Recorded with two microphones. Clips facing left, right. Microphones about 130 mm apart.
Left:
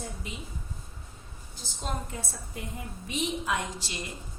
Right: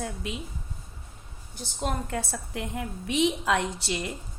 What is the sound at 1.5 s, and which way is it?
A woman's voice, 65° right (ahead or behind).